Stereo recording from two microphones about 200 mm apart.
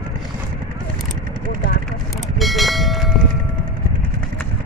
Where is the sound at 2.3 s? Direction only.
Centre (ahead or behind).